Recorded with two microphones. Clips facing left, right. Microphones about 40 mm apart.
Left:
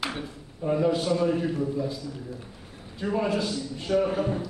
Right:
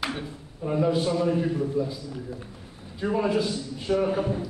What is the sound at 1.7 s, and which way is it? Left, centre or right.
Speech, centre.